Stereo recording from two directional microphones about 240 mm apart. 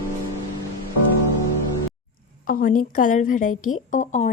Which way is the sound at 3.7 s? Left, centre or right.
Left.